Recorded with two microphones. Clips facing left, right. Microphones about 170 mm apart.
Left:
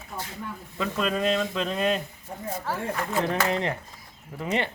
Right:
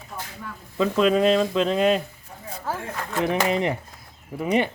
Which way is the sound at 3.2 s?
15° right (ahead or behind).